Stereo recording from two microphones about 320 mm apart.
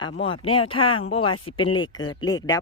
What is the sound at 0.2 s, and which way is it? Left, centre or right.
Speech, centre.